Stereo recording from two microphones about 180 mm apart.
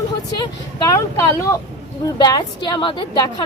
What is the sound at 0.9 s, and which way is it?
A woman's voice, 15° left (ahead or behind).